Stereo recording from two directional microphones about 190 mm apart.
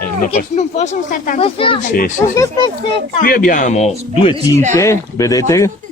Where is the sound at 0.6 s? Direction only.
40° left (ahead or behind).